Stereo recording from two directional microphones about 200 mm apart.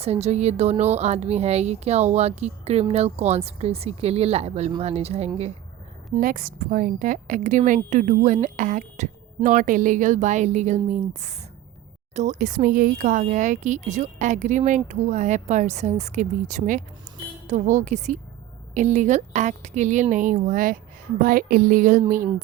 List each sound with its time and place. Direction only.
0.0 s speech: 30° right (ahead or behind)
6.1 s speech: 45° right (ahead or behind)